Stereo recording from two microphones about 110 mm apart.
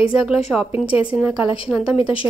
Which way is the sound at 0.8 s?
55° left (ahead or behind).